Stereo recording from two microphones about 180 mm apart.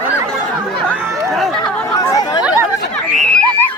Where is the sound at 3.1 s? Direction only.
5° left (ahead or behind).